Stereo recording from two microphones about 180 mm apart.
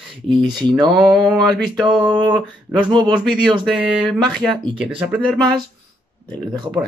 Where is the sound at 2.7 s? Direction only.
15° right (ahead or behind).